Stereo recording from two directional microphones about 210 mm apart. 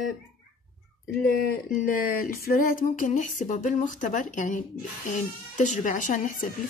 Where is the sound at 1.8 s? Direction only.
40° left (ahead or behind).